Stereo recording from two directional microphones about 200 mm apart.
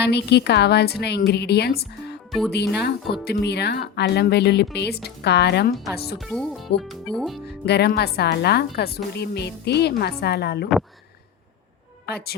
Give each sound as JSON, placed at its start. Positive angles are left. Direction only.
{"t": 0.0, "sound": "speech", "side_deg": 55}
{"t": 6.1, "sound": "speech", "side_deg": 0}
{"t": 7.4, "sound": "speech", "side_deg": 55}
{"t": 12.0, "sound": "a woman's voice", "side_deg": 50}